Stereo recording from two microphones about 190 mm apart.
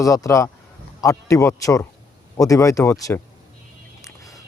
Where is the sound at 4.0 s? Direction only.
15° left (ahead or behind).